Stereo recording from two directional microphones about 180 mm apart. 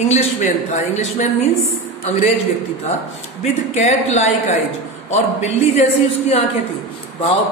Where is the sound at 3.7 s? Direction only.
40° left (ahead or behind).